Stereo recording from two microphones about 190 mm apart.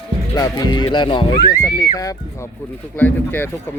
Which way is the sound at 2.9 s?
10° left (ahead or behind).